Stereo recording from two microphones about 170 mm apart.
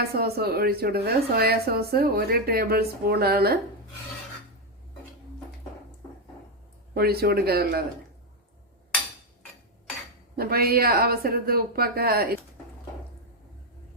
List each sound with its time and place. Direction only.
0.1 s a woman's voice: 65° right (ahead or behind)
6.9 s speech: 65° right (ahead or behind)
10.3 s a woman's voice: 65° right (ahead or behind)